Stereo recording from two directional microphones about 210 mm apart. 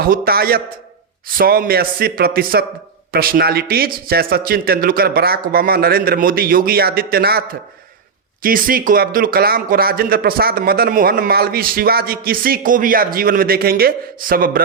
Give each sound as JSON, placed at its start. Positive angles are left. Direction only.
{"t": 0.0, "sound": "speech", "side_deg": -45}